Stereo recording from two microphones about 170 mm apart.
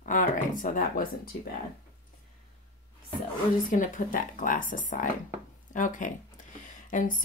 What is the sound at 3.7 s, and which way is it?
Speech, 50° left (ahead or behind).